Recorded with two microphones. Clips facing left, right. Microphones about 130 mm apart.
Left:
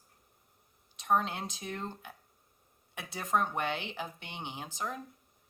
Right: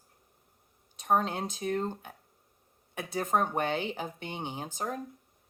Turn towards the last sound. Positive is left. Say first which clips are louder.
# right 3 dB
turn(degrees=-45)  # may be behind; listen again after turning